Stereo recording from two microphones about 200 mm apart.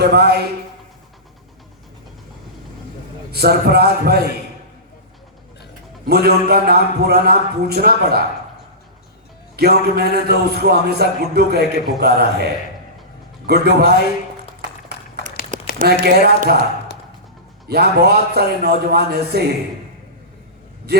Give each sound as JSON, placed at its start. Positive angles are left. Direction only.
{"t": 0.0, "sound": "a man's voice", "side_deg": -55}
{"t": 3.3, "sound": "a man's voice", "side_deg": -50}
{"t": 6.1, "sound": "a man's voice", "side_deg": -50}
{"t": 9.6, "sound": "a man's voice", "side_deg": -50}
{"t": 13.5, "sound": "a man's voice", "side_deg": -50}
{"t": 15.8, "sound": "a man's voice", "side_deg": -50}
{"t": 17.7, "sound": "a man's voice", "side_deg": -55}
{"t": 20.9, "sound": "a man's voice", "side_deg": -55}